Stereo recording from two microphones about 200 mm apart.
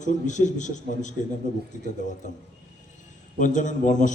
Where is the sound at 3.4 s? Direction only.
40° left (ahead or behind).